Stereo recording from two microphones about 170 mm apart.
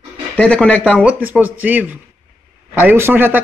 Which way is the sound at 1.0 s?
10° right (ahead or behind).